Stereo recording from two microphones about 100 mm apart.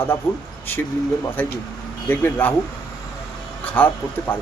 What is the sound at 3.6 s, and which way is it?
Speech, 15° left (ahead or behind).